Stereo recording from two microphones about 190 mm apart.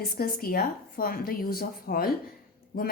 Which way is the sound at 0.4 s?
50° left (ahead or behind).